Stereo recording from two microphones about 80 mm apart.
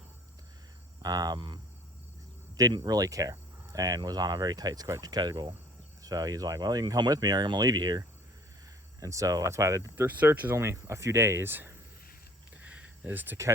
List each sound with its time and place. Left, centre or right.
1.0 s speech: right
2.7 s cricket: right
6.0 s speech: right
9.0 s cricket: right
10.1 s speech: right
10.5 s speech: right
12.6 s a sound: centre